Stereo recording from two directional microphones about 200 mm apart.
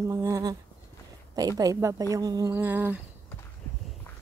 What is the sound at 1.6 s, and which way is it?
A woman's voice, 15° right (ahead or behind).